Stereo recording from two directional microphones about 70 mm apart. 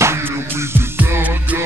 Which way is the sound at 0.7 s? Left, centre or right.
Right.